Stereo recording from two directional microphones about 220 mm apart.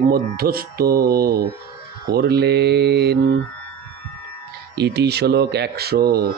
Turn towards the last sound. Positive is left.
turn(degrees=-45)  # may be behind; listen again after turning